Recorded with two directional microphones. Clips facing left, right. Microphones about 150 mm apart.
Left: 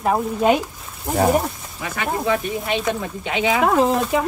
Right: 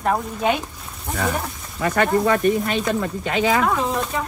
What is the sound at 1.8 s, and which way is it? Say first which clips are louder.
Speech: right 7 dB; 65° right (ahead or behind).